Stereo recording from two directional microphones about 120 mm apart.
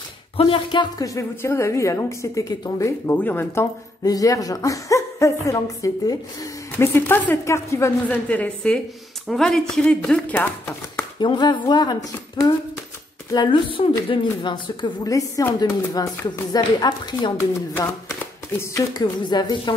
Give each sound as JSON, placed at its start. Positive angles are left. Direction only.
{"t": 0.4, "sound": "speech", "side_deg": 45}
{"t": 1.0, "sound": "speech", "side_deg": 25}
{"t": 3.3, "sound": "speech", "side_deg": 15}
{"t": 4.0, "sound": "speech", "side_deg": 30}
{"t": 8.3, "sound": "speech", "side_deg": 10}
{"t": 11.1, "sound": "speech", "side_deg": 40}
{"t": 17.4, "sound": "speech", "side_deg": 20}